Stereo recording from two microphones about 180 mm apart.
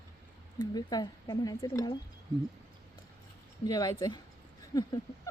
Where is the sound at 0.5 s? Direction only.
20° left (ahead or behind).